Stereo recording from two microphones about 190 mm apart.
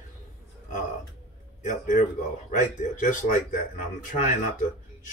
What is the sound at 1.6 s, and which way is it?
Speech, 40° left (ahead or behind).